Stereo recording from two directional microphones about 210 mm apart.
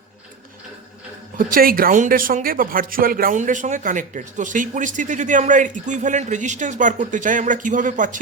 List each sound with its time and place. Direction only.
1.4 s speech: 40° right (ahead or behind)